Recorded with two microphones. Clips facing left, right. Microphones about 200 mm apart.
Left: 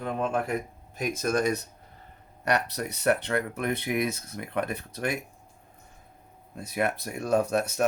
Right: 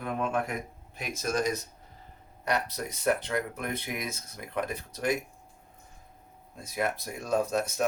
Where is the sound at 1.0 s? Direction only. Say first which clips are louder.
Left 4 dB; 50° left (ahead or behind).